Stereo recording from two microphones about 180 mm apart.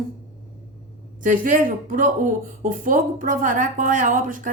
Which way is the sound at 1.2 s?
45° right (ahead or behind).